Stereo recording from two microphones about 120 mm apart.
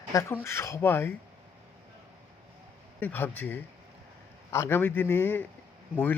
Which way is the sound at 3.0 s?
15° left (ahead or behind).